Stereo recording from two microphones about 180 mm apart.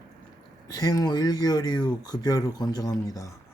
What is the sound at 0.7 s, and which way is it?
Speech, 20° left (ahead or behind).